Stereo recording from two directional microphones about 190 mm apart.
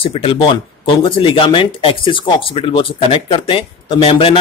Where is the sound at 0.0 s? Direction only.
30° left (ahead or behind).